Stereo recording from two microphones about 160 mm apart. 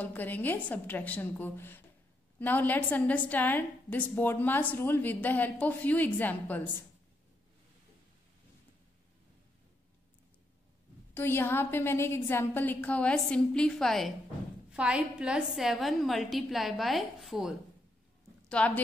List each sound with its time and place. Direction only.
0.0 s a woman's voice: 10° left (ahead or behind)
11.1 s a woman's voice: 15° left (ahead or behind); by 17.6 s centre (ahead or behind)
18.6 s a woman's voice: 5° left (ahead or behind)